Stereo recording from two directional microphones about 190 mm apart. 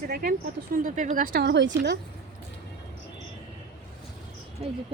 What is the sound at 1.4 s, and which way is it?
Speech, 65° right (ahead or behind).